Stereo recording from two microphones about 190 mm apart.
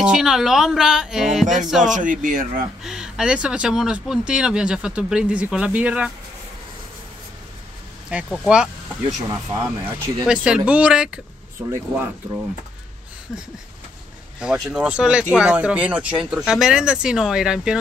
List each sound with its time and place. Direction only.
0.0 s speech: 5° right (ahead or behind)
2.0 s speech: 45° right (ahead or behind)
2.8 s speech: 5° right (ahead or behind)
8.1 s speech: 5° right (ahead or behind)
9.5 s speech: 15° right (ahead or behind)
10.2 s speech: 5° right (ahead or behind)
14.4 s speech: 5° right (ahead or behind)